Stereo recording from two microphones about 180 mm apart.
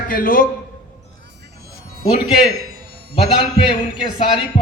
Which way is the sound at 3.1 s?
30° left (ahead or behind).